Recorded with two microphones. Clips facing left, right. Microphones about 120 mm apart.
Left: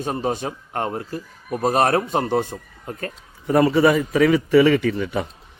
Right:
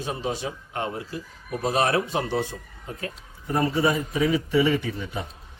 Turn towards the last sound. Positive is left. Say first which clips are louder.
# left 7 dB
turn(degrees=70)  # may be behind; listen again after turning